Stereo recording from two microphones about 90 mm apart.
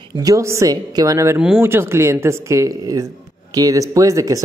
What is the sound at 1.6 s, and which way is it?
Speech, 25° right (ahead or behind).